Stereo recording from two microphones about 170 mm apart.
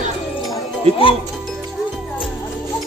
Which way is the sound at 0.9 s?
35° right (ahead or behind).